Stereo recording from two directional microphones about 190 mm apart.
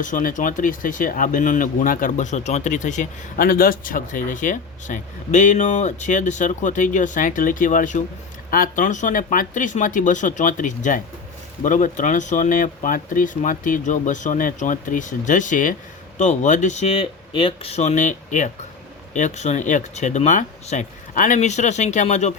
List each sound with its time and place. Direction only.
0.0 s speech: 45° left (ahead or behind)